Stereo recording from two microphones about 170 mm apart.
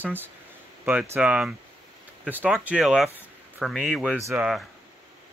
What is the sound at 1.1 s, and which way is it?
Speech, 5° right (ahead or behind).